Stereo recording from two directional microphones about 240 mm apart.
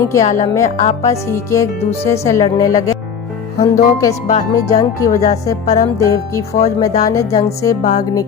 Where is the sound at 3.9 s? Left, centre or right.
Centre.